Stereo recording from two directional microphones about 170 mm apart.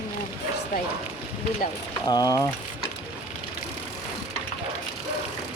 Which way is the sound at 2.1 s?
20° left (ahead or behind).